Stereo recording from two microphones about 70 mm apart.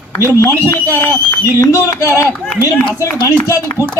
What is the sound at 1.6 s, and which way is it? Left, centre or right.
Speech, left.